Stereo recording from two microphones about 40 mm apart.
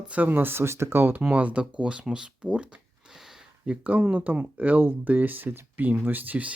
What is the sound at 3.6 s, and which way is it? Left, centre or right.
Speech, right.